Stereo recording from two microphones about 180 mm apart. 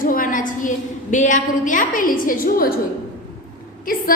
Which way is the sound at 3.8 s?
50° left (ahead or behind).